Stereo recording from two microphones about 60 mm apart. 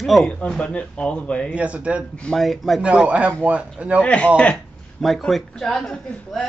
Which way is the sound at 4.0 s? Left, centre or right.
Left.